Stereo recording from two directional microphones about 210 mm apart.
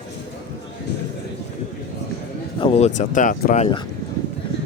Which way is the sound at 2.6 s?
25° left (ahead or behind).